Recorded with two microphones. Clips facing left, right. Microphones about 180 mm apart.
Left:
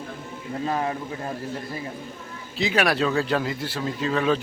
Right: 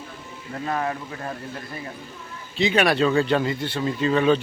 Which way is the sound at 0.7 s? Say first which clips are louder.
Right 1 dB; 20° left (ahead or behind).